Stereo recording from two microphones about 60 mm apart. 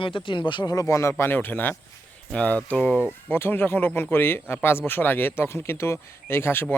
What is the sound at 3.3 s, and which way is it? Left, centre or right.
Speech, left.